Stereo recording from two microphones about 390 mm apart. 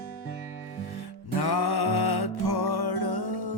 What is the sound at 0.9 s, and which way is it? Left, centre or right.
Music, left.